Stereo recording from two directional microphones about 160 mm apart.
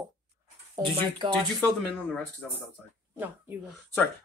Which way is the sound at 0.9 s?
30° right (ahead or behind).